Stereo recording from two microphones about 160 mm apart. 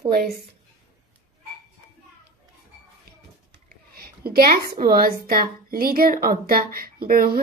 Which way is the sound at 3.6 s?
70° right (ahead or behind).